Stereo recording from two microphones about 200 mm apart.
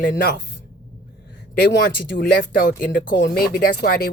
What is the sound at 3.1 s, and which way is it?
Speech, 55° left (ahead or behind).